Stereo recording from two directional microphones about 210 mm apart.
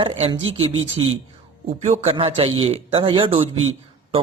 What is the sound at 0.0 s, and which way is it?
A man's voice, 25° right (ahead or behind).